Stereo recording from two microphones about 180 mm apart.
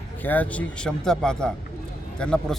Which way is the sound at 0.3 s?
10° left (ahead or behind).